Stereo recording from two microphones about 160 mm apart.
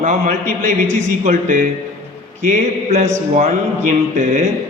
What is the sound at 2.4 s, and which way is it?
A man's voice, 55° right (ahead or behind).